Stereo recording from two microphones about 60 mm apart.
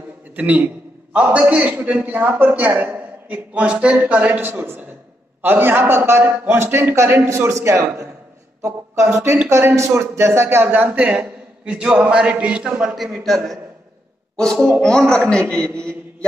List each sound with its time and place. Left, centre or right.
0.4 s a man's voice: right
3.3 s a man's voice: right
7.3 s speech: right
10.9 s speech: centre
12.1 s chant: centre
12.8 s a man's voice: centre
14.3 s a man's voice: centre